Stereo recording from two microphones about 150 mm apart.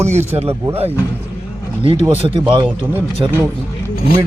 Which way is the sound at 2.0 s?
40° right (ahead or behind).